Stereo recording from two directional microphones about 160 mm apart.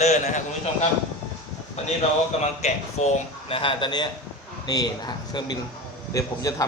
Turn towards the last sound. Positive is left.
turn(degrees=20)  # may be behind; listen again after turning